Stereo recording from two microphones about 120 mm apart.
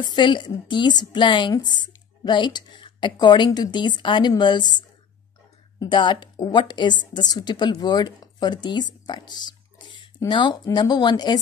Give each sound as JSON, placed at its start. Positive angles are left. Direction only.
{"t": 0.0, "sound": "a woman's voice", "side_deg": 40}